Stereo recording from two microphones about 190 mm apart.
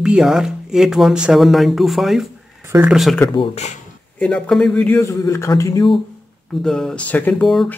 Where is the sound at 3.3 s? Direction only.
30° left (ahead or behind).